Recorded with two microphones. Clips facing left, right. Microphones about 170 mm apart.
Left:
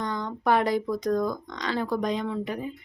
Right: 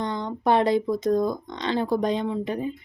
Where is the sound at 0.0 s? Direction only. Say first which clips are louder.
Right 2 dB; 25° right (ahead or behind).